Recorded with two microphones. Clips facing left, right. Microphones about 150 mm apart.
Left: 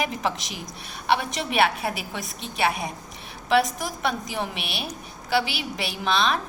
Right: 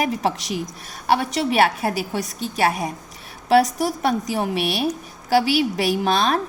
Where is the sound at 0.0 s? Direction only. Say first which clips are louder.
Right 5 dB; 35° right (ahead or behind).